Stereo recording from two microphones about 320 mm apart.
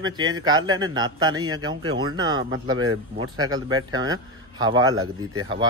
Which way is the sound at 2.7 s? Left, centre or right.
Right.